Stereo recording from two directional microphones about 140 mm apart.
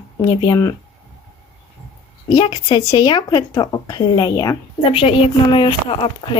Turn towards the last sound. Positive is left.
turn(degrees=40)  # may be behind; listen again after turning